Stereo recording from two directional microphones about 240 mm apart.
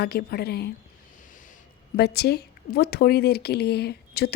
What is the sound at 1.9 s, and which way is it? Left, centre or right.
Speech, left.